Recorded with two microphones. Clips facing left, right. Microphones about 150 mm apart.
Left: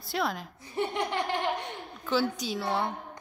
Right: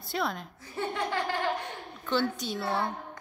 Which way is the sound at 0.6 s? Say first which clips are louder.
Left 3 dB; 15° left (ahead or behind).